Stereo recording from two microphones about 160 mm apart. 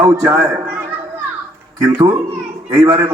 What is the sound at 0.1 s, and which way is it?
Speech, 20° right (ahead or behind).